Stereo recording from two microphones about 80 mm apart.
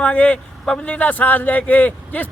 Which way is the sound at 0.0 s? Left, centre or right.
Centre.